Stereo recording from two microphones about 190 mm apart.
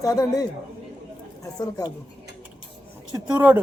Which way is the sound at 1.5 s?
20° left (ahead or behind).